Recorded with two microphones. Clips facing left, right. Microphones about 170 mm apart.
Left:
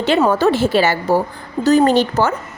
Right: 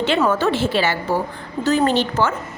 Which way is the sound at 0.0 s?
40° left (ahead or behind).